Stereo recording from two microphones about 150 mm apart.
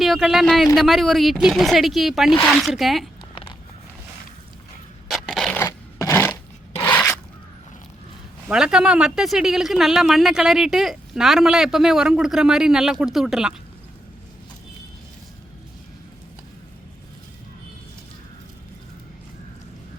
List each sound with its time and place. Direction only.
0.0 s speech: centre (ahead or behind)
5.0 s scrape: centre (ahead or behind)
5.5 s a sound: 20° left (ahead or behind)
8.4 s speech: 5° right (ahead or behind)